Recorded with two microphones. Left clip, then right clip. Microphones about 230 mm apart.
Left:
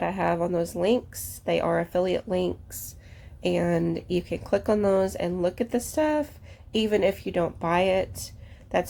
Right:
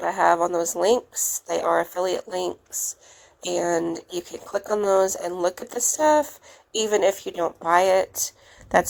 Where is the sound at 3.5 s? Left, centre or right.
Centre.